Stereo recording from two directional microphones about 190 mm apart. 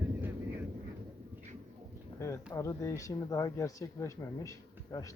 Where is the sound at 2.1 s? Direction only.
15° left (ahead or behind).